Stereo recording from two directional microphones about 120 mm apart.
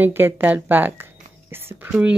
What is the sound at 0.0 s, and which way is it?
Speech, 15° right (ahead or behind).